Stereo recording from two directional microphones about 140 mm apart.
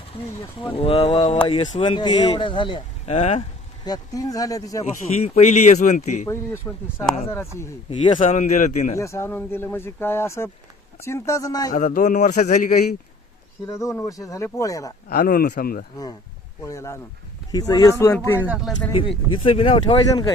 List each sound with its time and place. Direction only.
0.6 s speech: 40° left (ahead or behind)
1.8 s speech: 35° left (ahead or behind)
3.8 s speech: 25° left (ahead or behind)
4.8 s speech: 50° left (ahead or behind)
6.2 s speech: 20° left (ahead or behind)
7.9 s speech: 40° left (ahead or behind)
8.4 s speech: 60° left (ahead or behind)
9.0 s speech: 20° left (ahead or behind)
11.7 s speech: 65° left (ahead or behind)
13.7 s speech: 20° left (ahead or behind)
15.1 s speech: 90° left
16.6 s speech: 20° left (ahead or behind)
18.3 s speech: 10° right (ahead or behind)
18.9 s speech: 35° left (ahead or behind)